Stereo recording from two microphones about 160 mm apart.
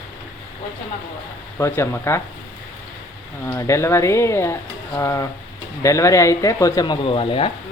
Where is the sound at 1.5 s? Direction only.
15° left (ahead or behind).